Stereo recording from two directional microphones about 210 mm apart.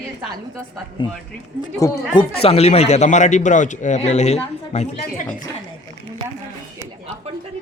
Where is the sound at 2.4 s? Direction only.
30° left (ahead or behind).